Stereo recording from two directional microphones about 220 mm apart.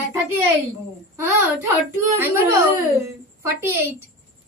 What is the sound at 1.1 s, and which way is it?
A woman's voice, 10° right (ahead or behind).